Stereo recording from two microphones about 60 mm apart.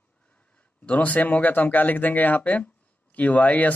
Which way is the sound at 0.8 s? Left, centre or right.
Left.